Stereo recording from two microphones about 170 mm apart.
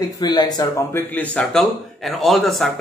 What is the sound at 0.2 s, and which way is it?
Speech, 25° left (ahead or behind).